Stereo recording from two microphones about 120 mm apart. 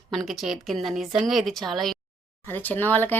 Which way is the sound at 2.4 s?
15° left (ahead or behind).